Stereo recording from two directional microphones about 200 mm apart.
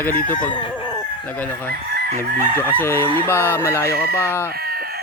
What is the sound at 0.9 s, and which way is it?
Chicken, 10° left (ahead or behind).